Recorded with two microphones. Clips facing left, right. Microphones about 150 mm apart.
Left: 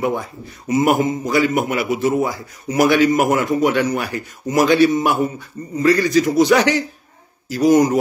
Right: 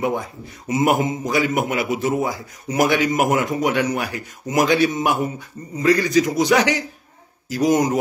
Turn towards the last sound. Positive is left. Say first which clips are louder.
# left 4 dB
turn(degrees=-20)  # may be behind; listen again after turning